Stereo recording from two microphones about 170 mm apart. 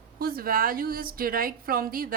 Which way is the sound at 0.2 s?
60° right (ahead or behind).